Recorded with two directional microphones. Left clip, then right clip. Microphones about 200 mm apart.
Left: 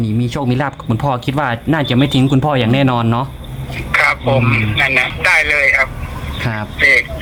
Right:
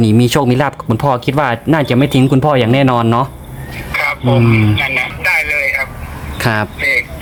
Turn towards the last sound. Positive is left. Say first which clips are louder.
# left 3 dB
turn(degrees=20)  # may be behind; listen again after turning